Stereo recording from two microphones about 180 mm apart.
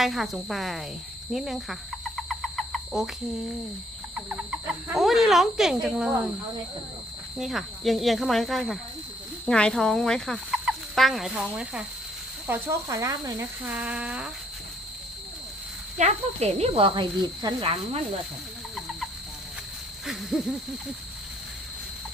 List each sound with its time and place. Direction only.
0.0 s fowl: centre (ahead or behind)
1.3 s insect: centre (ahead or behind)
4.1 s fowl: 5° right (ahead or behind)
7.3 s fowl: centre (ahead or behind)
12.5 s speech: 15° right (ahead or behind)
16.0 s speech: 40° right (ahead or behind)